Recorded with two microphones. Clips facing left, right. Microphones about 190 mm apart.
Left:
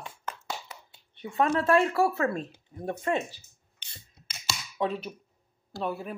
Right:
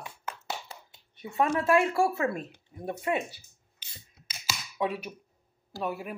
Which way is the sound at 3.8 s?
5° right (ahead or behind).